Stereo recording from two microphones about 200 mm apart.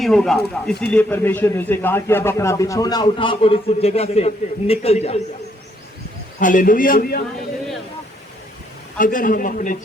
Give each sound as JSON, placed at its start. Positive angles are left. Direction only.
{"t": 0.0, "sound": "speech", "side_deg": 0}
{"t": 6.4, "sound": "a man's voice", "side_deg": 45}
{"t": 9.0, "sound": "a man's voice", "side_deg": 45}